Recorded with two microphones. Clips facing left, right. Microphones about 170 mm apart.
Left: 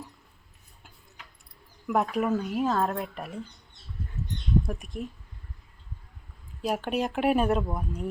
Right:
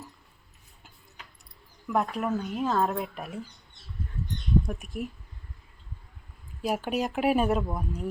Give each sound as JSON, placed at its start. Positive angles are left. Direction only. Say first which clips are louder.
{"t": 1.9, "sound": "speech", "louder": "left 2 dB", "side_deg": 0}
{"t": 4.6, "sound": "speech", "louder": "even", "side_deg": 0}
{"t": 6.6, "sound": "speech", "louder": "even", "side_deg": -5}